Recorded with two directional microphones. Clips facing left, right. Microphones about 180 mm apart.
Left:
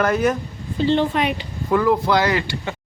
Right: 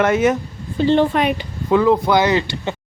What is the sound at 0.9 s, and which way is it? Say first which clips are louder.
Speech: right 4 dB; 50° right (ahead or behind).